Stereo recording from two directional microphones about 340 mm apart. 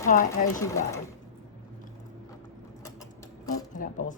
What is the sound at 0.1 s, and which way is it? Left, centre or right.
Speech, left.